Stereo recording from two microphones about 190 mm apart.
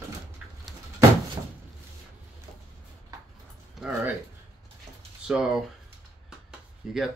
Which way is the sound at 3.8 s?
5° right (ahead or behind).